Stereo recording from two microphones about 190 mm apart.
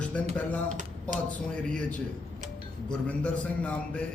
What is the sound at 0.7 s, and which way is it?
Speech, 40° right (ahead or behind).